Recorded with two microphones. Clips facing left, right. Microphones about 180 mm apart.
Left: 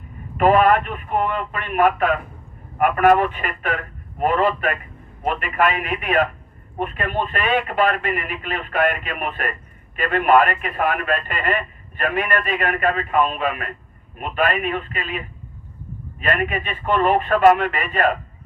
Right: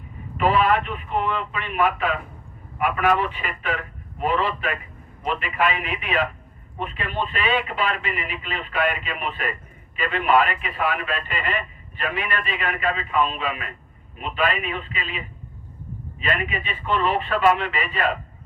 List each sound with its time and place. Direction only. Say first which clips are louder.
0.3 s a man's voice: left 5 dB; 50° left (ahead or behind)
16.2 s a man's voice: left 4 dB; 50° left (ahead or behind)